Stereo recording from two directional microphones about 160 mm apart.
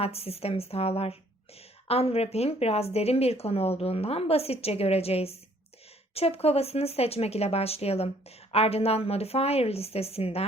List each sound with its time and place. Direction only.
0.0 s speech: 40° left (ahead or behind)